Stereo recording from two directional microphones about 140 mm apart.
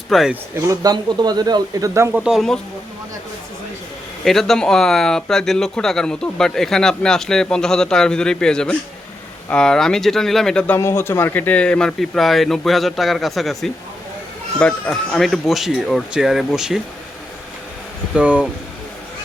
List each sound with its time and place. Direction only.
0.1 s speech: centre (ahead or behind)
0.7 s speech: 25° right (ahead or behind)
2.2 s speech: centre (ahead or behind)
4.2 s speech: centre (ahead or behind)
10.8 s speech: 20° left (ahead or behind); by 16.8 s 5° right (ahead or behind)
18.1 s speech: 10° right (ahead or behind)